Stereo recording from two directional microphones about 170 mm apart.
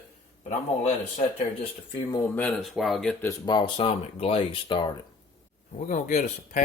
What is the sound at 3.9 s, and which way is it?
Speech, 40° left (ahead or behind).